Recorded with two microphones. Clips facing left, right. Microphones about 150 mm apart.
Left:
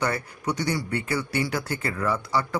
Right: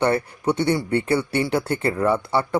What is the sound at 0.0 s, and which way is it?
Speech, 30° right (ahead or behind).